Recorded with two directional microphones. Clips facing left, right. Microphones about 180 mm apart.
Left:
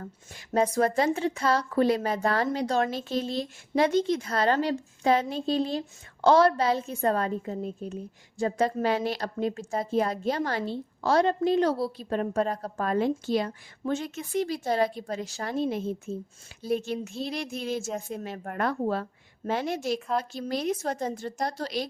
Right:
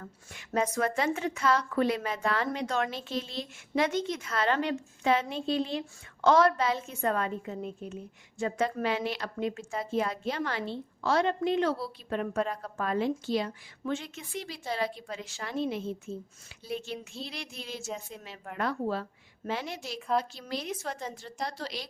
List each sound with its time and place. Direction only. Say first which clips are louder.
0.0 s a woman's voice: left 4 dB; 35° left (ahead or behind)
20.0 s a woman's voice: even; centre (ahead or behind)
20.5 s a woman's voice: left 8 dB; 45° left (ahead or behind)